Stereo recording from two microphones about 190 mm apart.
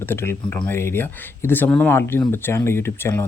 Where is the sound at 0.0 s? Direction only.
10° left (ahead or behind).